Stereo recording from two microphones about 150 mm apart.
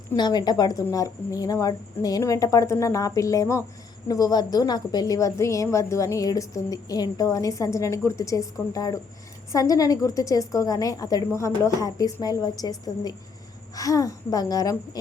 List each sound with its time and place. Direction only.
0.2 s a woman's voice: 25° left (ahead or behind)